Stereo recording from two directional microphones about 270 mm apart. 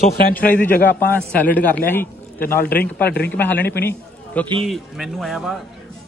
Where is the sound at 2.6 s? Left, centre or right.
Left.